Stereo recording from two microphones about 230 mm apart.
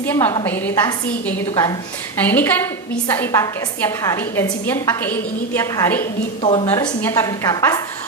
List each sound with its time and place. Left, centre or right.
0.0 s a woman's voice: centre
6.4 s a woman's voice: left